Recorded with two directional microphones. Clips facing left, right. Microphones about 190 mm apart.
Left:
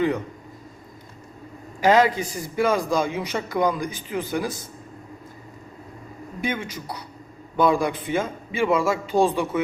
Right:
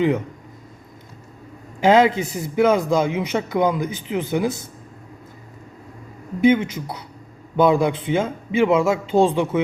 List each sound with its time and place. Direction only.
1.8 s a man's voice: 20° right (ahead or behind)
6.4 s a man's voice: 20° right (ahead or behind)